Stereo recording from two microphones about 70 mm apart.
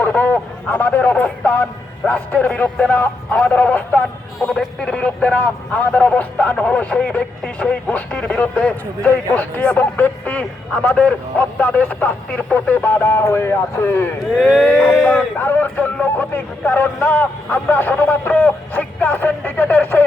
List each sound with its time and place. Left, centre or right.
0.0 s a man's voice: left
4.4 s speech: centre
4.9 s a man's voice: centre
14.3 s speech: centre
15.4 s a man's voice: left